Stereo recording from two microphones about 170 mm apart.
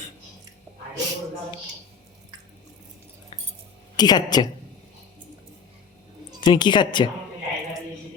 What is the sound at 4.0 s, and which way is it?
Speech, 25° left (ahead or behind).